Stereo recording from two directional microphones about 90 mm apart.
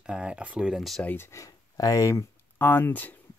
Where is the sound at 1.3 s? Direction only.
40° left (ahead or behind).